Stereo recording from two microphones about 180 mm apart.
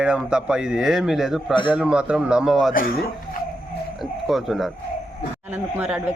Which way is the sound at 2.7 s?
50° left (ahead or behind).